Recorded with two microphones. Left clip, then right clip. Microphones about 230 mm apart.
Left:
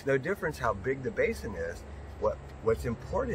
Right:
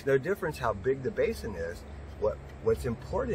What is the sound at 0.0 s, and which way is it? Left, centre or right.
Speech, centre.